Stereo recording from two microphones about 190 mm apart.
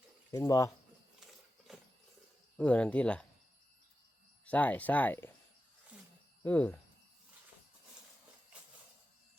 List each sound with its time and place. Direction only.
0.3 s speech: 15° left (ahead or behind)
1.2 s a sound: centre (ahead or behind)
2.6 s speech: 5° left (ahead or behind)
4.4 s speech: 10° left (ahead or behind)
6.4 s cricket: 10° left (ahead or behind)